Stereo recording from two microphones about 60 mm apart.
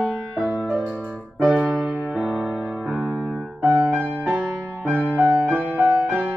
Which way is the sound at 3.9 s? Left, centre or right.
Right.